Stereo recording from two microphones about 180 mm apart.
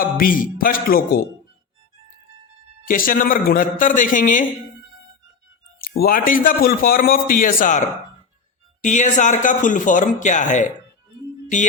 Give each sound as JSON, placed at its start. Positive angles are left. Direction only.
{"t": 0.0, "sound": "a man's voice", "side_deg": 50}
{"t": 2.8, "sound": "a man's voice", "side_deg": 50}
{"t": 5.8, "sound": "a man's voice", "side_deg": 55}